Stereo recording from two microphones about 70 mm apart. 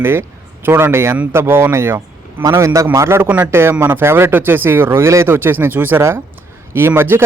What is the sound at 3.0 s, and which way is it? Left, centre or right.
Speech, right.